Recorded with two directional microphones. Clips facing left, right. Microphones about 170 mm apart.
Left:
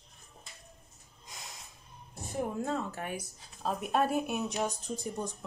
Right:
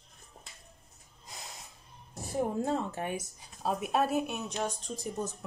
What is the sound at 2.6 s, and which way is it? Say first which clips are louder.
Speech: right 3 dB; 30° right (ahead or behind).